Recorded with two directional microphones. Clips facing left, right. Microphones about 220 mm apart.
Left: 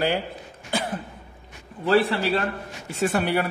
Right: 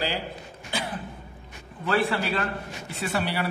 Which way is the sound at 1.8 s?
40° left (ahead or behind).